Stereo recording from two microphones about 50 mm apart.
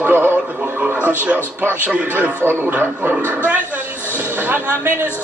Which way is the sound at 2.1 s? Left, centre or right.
Right.